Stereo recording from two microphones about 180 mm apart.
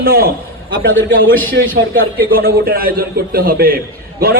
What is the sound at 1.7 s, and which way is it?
A man's voice, 55° right (ahead or behind).